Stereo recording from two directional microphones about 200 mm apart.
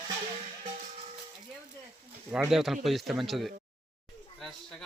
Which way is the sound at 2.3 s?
5° right (ahead or behind).